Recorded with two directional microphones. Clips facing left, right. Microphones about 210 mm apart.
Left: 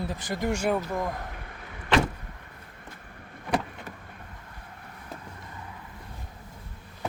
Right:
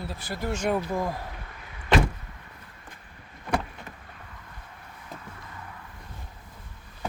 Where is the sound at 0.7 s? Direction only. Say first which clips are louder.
Right 1 dB; centre (ahead or behind).